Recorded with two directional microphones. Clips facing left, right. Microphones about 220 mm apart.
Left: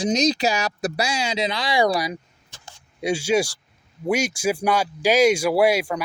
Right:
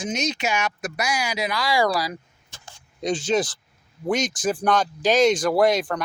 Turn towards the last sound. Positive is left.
turn(degrees=10)  # may be behind; listen again after turning